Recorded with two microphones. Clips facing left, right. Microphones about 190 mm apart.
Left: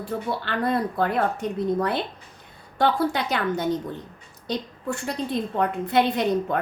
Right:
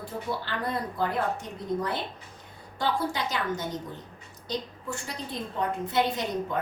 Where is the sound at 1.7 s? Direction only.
65° left (ahead or behind).